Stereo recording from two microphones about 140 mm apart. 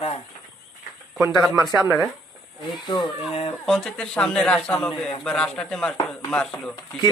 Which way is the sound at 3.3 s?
45° left (ahead or behind).